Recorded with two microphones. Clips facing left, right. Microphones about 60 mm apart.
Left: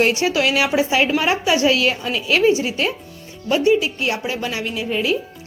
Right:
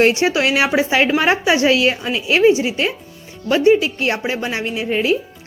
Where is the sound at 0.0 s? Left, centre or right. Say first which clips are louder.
Right 3 dB; right.